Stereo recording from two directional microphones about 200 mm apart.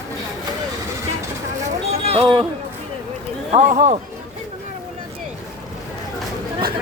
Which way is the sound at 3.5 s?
35° right (ahead or behind).